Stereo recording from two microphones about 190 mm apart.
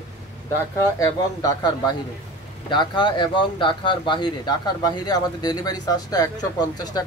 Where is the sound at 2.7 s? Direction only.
25° left (ahead or behind).